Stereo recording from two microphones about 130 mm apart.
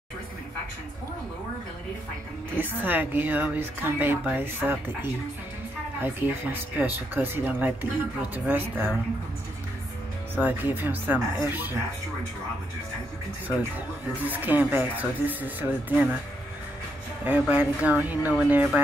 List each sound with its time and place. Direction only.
2.5 s speech: 15° right (ahead or behind)
10.4 s speech: 15° right (ahead or behind)
14.2 s speech: 15° right (ahead or behind)
17.2 s speech: 10° right (ahead or behind)